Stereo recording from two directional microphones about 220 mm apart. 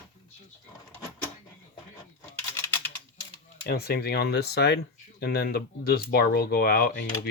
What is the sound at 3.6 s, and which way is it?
Speech, 45° left (ahead or behind).